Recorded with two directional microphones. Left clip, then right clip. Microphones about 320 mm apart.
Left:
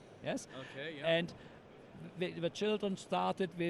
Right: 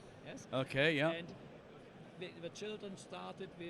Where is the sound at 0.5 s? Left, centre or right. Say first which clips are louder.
Right 11 dB; right.